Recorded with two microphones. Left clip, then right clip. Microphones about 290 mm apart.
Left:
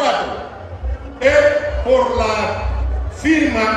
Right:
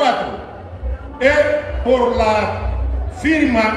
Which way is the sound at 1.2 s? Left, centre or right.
Right.